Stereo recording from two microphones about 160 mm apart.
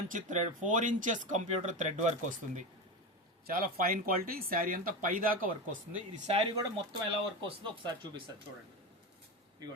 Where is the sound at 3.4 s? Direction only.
65° right (ahead or behind).